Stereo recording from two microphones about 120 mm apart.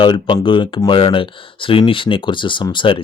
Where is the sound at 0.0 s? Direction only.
40° left (ahead or behind).